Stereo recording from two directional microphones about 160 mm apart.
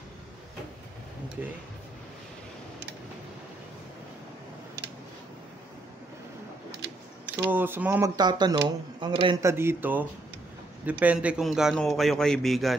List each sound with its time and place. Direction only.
7.4 s speech: 15° right (ahead or behind)
8.2 s speech: 25° right (ahead or behind)
9.4 s a man's voice: 15° right (ahead or behind); by 12.7 s centre (ahead or behind)